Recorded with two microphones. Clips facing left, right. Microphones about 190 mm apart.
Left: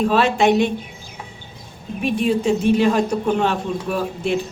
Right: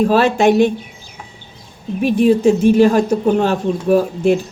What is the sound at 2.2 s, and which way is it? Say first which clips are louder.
Speech: right 6 dB; 45° right (ahead or behind).